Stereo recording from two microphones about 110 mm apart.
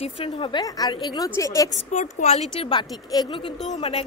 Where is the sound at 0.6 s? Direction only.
35° left (ahead or behind).